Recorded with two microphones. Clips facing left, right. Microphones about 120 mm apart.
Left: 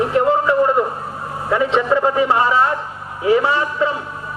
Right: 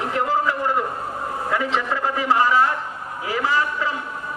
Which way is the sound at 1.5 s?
25° left (ahead or behind).